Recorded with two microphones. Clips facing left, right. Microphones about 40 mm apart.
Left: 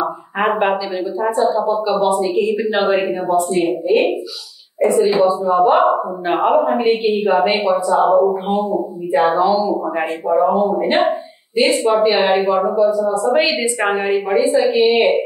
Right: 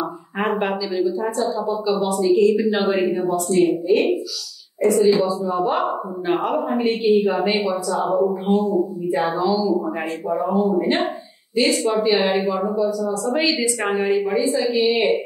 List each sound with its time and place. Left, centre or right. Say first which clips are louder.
0.0 s a man's voice: left 5 dB; left